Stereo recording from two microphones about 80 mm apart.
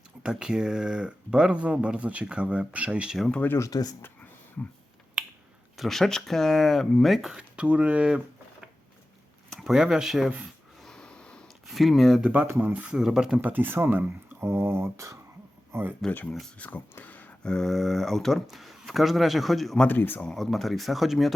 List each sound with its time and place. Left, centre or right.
0.2 s speech: centre
3.6 s speech: left
5.7 s speech: centre
9.5 s speech: centre
10.8 s snort: centre
11.7 s speech: centre
12.2 s speech: centre
13.0 s speech: centre
13.4 s speech: right
15.7 s speech: right
16.0 s speech: centre
17.4 s speech: centre
19.9 s speech: left
20.2 s speech: centre